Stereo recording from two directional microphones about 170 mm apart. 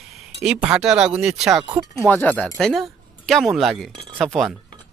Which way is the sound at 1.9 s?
10° left (ahead or behind).